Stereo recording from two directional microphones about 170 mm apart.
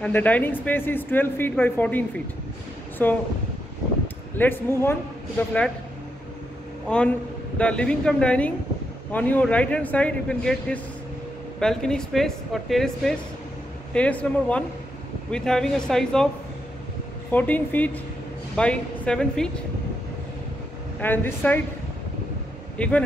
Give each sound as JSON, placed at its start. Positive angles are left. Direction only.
{"t": 0.0, "sound": "speech", "side_deg": 10}
{"t": 4.4, "sound": "speech", "side_deg": 15}
{"t": 6.9, "sound": "a woman's voice", "side_deg": 5}
{"t": 17.3, "sound": "a woman's voice", "side_deg": 10}
{"t": 21.0, "sound": "speech", "side_deg": 10}
{"t": 22.8, "sound": "speech", "side_deg": 5}